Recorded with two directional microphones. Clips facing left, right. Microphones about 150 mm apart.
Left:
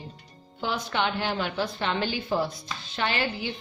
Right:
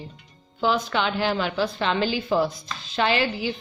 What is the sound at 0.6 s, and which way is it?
A woman's voice, 90° right.